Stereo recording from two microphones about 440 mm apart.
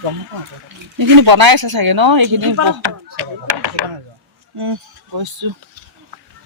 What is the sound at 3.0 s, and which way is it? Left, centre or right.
Speech, right.